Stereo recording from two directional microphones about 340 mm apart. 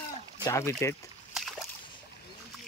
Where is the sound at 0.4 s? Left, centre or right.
Centre.